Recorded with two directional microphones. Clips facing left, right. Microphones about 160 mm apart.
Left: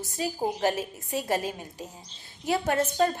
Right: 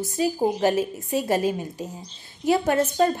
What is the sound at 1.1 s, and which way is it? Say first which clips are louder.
Speech: right 5 dB; 5° right (ahead or behind).